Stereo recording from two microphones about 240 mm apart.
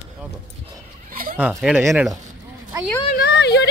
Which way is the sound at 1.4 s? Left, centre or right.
Centre.